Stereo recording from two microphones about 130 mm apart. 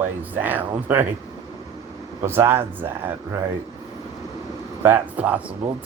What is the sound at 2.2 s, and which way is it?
Speech, 20° right (ahead or behind).